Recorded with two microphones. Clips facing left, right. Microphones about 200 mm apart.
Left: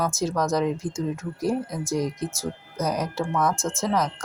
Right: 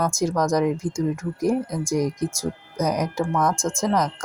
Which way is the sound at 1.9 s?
15° right (ahead or behind).